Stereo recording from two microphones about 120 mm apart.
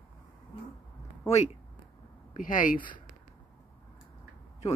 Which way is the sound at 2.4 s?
90° left.